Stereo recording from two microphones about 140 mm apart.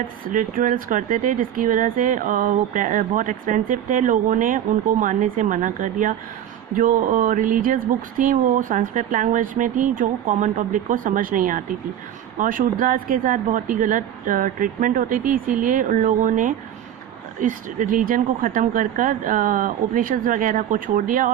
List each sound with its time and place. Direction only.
0.3 s speech: 75° right (ahead or behind)